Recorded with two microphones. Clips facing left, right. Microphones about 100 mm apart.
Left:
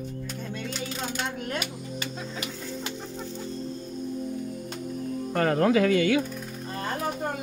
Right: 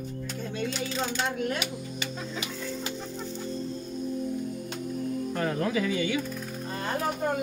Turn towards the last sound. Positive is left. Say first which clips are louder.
# left 6 dB
turn(degrees=70)  # may be behind; listen again after turning